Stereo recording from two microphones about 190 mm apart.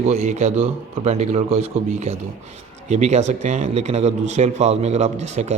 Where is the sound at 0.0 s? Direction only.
35° right (ahead or behind).